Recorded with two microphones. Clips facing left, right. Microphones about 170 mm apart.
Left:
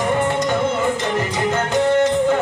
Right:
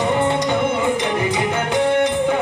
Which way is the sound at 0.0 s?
20° right (ahead or behind).